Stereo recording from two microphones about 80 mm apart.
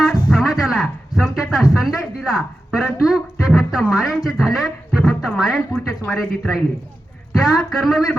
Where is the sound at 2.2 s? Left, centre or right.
Centre.